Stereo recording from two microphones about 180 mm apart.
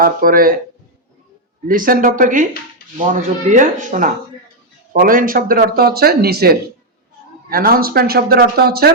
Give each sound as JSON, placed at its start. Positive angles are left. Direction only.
{"t": 0.0, "sound": "speech", "side_deg": -50}
{"t": 1.6, "sound": "speech", "side_deg": -50}